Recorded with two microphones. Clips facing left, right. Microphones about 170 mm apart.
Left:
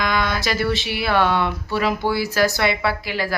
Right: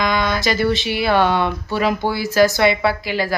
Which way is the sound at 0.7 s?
5° left (ahead or behind).